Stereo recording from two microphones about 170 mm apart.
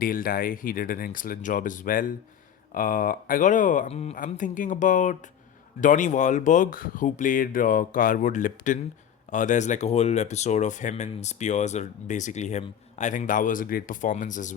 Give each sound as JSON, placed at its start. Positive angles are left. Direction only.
{"t": 0.0, "sound": "speech", "side_deg": 55}